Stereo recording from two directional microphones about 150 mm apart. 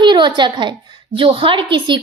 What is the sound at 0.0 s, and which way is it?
A woman's voice, 30° right (ahead or behind).